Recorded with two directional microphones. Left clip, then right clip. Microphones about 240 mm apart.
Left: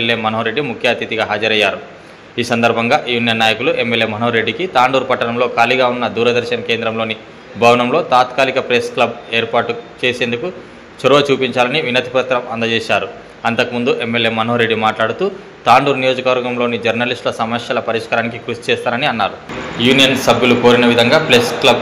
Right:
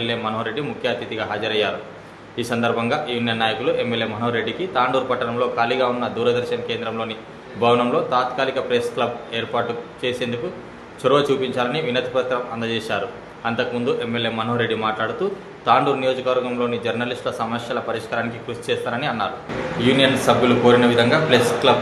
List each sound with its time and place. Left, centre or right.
0.0 s a man's voice: centre